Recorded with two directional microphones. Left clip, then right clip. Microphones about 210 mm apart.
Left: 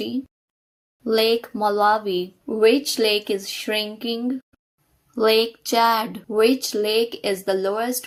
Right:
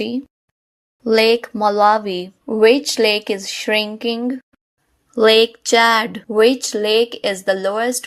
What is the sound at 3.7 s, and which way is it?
Speech, 50° right (ahead or behind).